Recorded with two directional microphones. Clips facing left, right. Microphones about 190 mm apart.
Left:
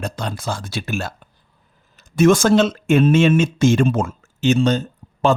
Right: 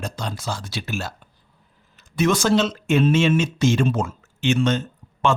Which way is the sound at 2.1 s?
45° left (ahead or behind).